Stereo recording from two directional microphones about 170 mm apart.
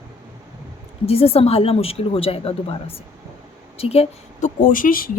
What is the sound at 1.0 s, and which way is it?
Speech, 35° left (ahead or behind).